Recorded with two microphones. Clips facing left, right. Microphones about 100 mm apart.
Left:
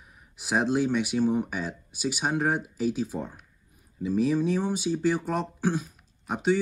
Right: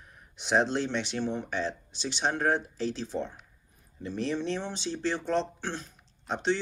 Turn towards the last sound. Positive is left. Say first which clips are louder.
# left 3 dB
turn(degrees=5)  # may be behind; listen again after turning